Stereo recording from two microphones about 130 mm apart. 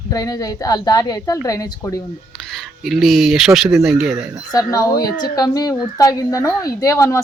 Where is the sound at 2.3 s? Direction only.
5° left (ahead or behind).